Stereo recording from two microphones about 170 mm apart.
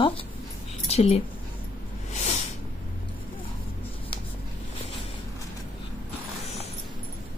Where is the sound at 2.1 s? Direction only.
40° left (ahead or behind).